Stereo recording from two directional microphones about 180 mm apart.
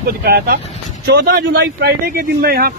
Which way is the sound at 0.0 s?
60° right (ahead or behind).